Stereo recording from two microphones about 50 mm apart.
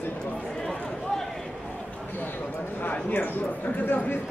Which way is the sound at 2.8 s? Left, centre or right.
Left.